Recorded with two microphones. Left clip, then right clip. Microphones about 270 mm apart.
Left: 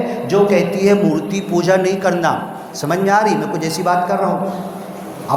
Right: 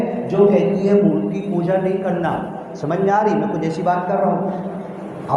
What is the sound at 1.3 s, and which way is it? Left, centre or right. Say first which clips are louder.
Speech: left 5 dB; left.